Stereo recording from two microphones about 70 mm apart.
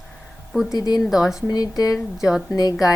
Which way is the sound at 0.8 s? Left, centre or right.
Left.